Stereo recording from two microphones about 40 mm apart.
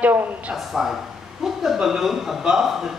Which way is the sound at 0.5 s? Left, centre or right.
Centre.